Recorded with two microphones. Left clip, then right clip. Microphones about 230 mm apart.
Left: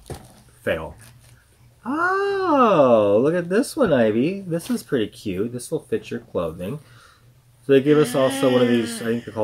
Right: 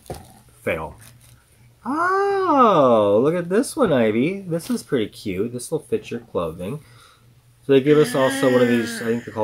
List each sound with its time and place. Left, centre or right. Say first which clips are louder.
1.8 s speech: right 1 dB; centre